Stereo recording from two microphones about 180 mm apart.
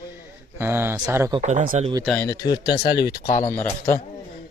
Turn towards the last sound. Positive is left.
turn(degrees=15)  # may be behind; listen again after turning